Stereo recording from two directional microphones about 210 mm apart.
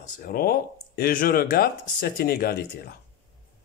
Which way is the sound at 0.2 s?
45° left (ahead or behind).